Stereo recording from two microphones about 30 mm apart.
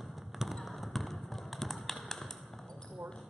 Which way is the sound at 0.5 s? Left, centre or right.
Centre.